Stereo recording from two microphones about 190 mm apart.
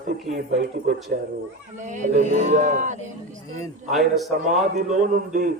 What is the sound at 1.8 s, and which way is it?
A man's voice, 40° right (ahead or behind).